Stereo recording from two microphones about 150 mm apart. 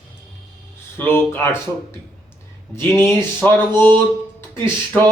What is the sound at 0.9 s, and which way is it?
Speech, 15° left (ahead or behind).